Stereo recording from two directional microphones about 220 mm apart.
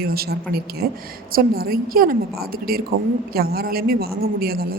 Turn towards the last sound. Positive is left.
turn(degrees=-45)  # may be behind; listen again after turning